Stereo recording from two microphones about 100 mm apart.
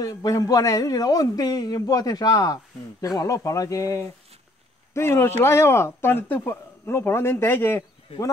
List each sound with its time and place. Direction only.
0.0 s a man's voice: 35° left (ahead or behind); by 7.8 s 20° left (ahead or behind)